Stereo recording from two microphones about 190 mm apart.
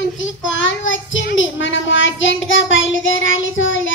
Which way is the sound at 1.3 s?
80° left.